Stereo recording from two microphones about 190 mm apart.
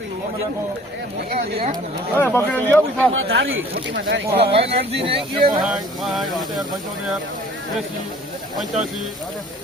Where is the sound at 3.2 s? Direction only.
65° right (ahead or behind).